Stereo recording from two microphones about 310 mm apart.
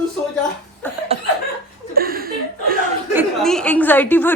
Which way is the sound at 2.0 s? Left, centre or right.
Right.